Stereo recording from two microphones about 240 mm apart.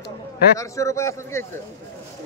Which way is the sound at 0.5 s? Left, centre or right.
Centre.